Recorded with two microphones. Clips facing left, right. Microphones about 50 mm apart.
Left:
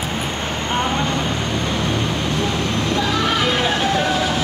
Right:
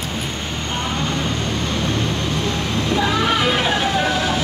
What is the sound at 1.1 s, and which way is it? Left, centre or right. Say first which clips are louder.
Vehicle: left 1 dB; centre.